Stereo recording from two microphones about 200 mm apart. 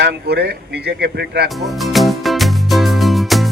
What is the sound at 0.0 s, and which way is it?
Speech, 55° right (ahead or behind).